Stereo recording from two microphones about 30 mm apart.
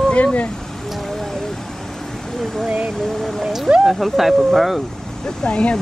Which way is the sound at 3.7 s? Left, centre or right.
Right.